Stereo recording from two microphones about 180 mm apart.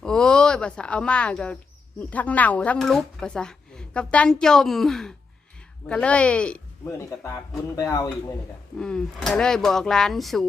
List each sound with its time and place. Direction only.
0.0 s a sound: 5° left (ahead or behind)
2.0 s speech: 10° left (ahead or behind)
8.8 s speech: 5° left (ahead or behind)